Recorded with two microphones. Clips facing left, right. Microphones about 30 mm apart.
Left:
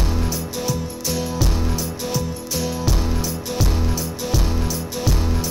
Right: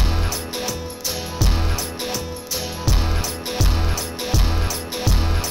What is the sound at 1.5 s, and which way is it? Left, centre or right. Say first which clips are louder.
Music: left 1 dB; right.